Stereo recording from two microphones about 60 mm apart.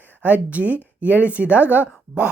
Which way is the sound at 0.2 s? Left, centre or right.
Right.